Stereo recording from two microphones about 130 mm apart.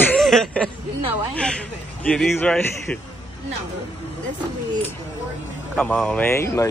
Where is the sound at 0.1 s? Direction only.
5° left (ahead or behind).